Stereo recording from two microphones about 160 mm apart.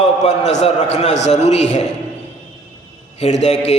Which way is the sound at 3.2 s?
45° left (ahead or behind).